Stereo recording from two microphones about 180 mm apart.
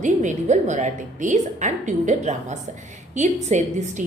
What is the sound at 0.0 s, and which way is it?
A woman's voice, 45° right (ahead or behind).